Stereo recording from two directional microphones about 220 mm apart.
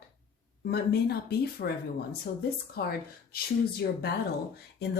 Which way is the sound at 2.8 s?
45° left (ahead or behind).